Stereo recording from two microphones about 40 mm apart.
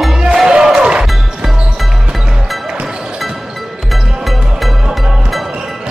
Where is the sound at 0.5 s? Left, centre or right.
Centre.